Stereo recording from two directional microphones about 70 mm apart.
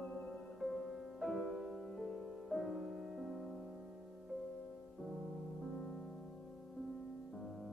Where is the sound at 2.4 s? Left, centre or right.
Centre.